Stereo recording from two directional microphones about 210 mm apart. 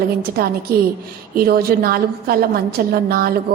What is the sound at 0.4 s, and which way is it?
A woman's voice, 50° right (ahead or behind).